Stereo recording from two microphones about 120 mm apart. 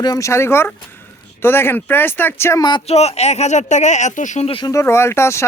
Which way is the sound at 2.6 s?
40° left (ahead or behind).